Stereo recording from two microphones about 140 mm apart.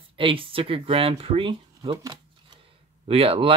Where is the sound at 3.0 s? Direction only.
45° right (ahead or behind).